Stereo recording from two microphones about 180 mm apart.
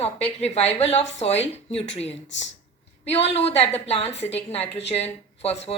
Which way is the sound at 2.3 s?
90° left.